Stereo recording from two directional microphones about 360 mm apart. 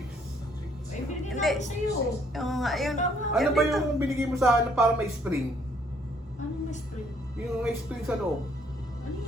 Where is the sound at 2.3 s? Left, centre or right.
Centre.